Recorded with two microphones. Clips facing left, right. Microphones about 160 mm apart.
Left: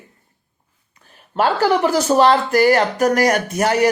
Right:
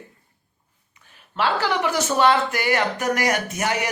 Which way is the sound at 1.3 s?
45° left (ahead or behind).